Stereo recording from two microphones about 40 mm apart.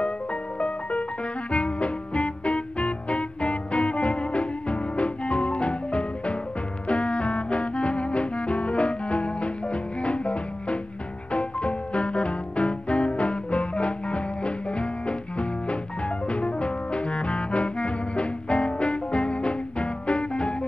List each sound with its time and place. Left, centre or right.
0.0 s music: left